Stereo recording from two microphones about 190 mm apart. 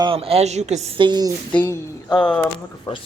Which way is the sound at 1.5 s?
15° left (ahead or behind).